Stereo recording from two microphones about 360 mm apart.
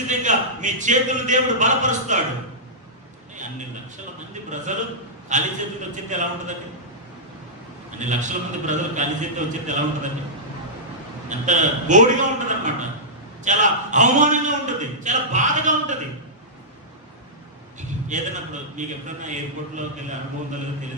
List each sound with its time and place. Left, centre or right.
0.0 s a man's voice: centre
4.7 s a man's voice: centre
8.0 s a man's voice: centre
11.2 s a man's voice: centre
17.7 s a man's voice: centre